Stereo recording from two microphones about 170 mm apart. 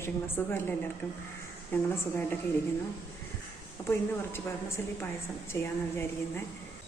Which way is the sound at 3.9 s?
15° left (ahead or behind).